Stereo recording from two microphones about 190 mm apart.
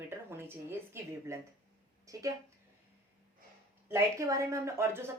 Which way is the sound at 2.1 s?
15° right (ahead or behind).